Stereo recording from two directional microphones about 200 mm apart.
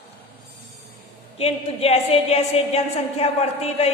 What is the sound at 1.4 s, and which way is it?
A woman's voice, 30° left (ahead or behind).